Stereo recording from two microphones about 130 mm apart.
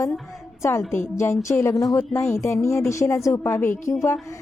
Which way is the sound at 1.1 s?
20° left (ahead or behind).